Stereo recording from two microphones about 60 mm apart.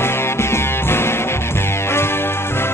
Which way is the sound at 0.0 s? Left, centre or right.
Left.